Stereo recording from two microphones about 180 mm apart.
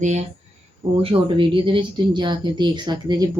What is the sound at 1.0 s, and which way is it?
A woman's voice, 25° right (ahead or behind).